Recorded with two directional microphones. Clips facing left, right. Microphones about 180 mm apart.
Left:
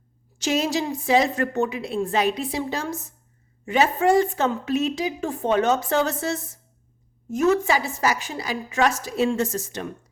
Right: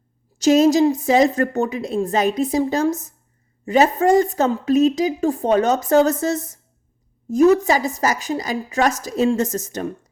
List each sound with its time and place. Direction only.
0.3 s a woman's voice: 40° right (ahead or behind)